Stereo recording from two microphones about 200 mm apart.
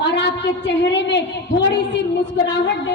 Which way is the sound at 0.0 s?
60° left (ahead or behind).